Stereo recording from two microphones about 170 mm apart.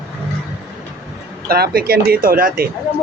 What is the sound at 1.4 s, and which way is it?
Speech, 65° right (ahead or behind).